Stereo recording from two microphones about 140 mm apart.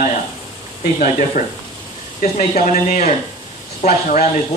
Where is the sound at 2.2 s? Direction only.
55° left (ahead or behind).